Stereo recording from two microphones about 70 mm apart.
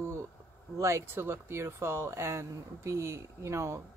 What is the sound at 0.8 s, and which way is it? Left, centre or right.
Speech, right.